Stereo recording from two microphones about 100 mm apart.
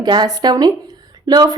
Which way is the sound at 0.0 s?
45° right (ahead or behind).